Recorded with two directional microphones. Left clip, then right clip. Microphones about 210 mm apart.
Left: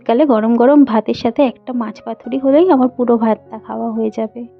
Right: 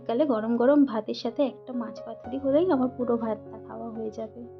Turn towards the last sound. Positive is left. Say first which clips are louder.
# left 15 dB
turn(degrees=40)  # may be behind; listen again after turning